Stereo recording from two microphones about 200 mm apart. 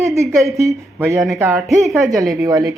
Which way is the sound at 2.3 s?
15° right (ahead or behind).